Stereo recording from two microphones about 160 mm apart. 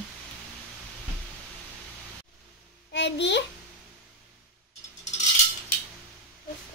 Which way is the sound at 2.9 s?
90° left.